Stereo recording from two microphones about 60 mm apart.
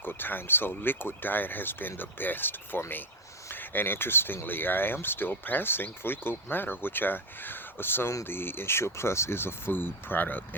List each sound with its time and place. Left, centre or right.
0.0 s speech: left